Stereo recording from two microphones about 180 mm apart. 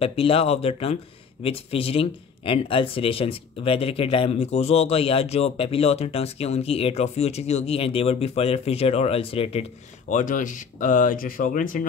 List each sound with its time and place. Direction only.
0.0 s speech: 30° left (ahead or behind); by 11.8 s 50° left (ahead or behind)